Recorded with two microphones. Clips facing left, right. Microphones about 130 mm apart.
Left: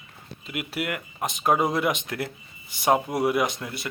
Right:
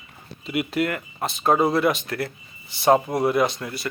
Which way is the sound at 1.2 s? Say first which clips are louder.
Right 3 dB; 15° left (ahead or behind).